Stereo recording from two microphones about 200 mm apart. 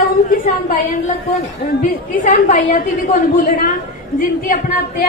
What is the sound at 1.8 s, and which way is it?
A woman's voice, 45° left (ahead or behind).